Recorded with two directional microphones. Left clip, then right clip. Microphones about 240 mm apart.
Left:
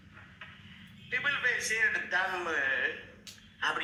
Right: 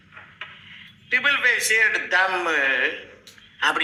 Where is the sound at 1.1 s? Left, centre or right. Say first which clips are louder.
Right 11 dB; right.